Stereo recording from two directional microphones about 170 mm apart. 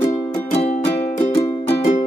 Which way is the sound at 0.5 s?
40° left (ahead or behind).